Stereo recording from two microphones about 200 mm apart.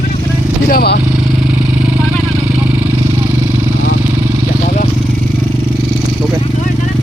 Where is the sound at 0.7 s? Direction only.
50° left (ahead or behind).